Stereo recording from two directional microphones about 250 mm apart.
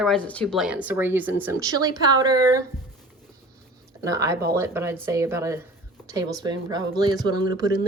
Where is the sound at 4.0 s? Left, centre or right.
Centre.